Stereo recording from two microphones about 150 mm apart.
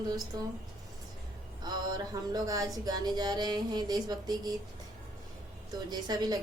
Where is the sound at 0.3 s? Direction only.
25° right (ahead or behind).